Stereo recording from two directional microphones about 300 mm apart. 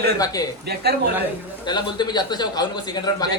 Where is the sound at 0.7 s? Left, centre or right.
Right.